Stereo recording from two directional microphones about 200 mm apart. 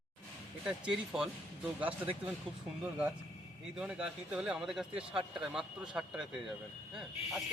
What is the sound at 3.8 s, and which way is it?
A man's voice, 5° right (ahead or behind).